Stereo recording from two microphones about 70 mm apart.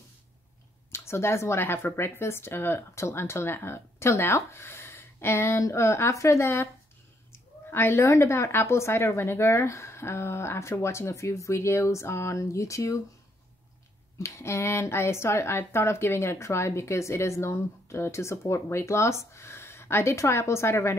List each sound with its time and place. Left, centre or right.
0.9 s speech: left
7.3 s a sound: left
8.1 s speech: left
14.1 s speech: left